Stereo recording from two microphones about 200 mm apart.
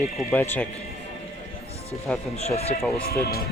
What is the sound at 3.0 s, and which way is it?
Speech, 50° left (ahead or behind).